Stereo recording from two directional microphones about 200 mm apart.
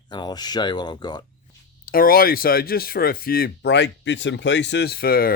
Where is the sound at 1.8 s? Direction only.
45° left (ahead or behind).